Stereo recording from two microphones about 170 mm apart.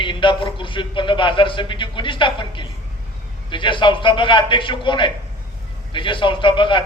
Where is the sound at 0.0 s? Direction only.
30° left (ahead or behind).